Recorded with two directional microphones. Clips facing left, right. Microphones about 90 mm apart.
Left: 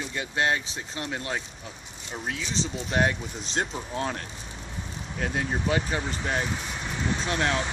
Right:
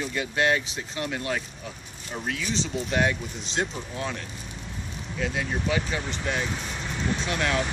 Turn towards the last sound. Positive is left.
turn(degrees=30)  # may be behind; listen again after turning